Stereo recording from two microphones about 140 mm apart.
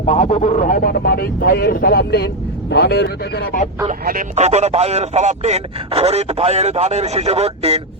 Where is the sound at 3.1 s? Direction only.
80° left.